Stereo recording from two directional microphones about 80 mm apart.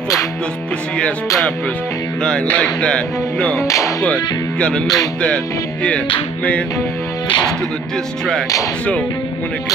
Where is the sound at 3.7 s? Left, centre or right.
Left.